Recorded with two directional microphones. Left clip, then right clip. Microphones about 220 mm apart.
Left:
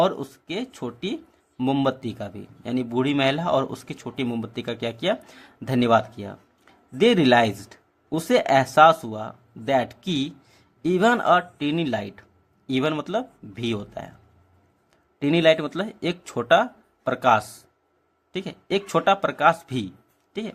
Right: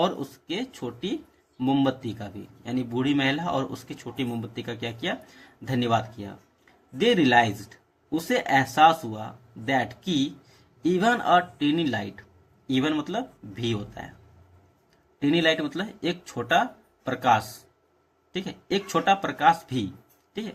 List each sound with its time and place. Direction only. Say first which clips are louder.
0.5 s speech: left 1 dB; 50° left (ahead or behind)
15.2 s speech: left 4 dB; 50° left (ahead or behind)
18.4 s speech: left 3 dB; 45° left (ahead or behind)